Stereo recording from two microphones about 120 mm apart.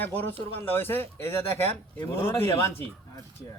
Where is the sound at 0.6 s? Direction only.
15° left (ahead or behind).